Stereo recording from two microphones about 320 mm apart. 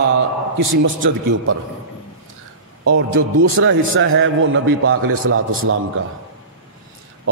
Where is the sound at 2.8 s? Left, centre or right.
Right.